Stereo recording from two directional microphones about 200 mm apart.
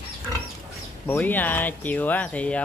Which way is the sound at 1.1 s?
10° left (ahead or behind).